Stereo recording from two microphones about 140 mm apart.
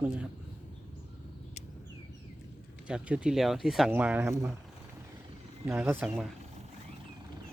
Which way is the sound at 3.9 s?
10° right (ahead or behind).